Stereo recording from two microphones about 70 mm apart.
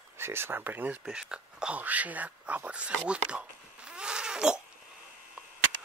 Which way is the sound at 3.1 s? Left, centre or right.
Centre.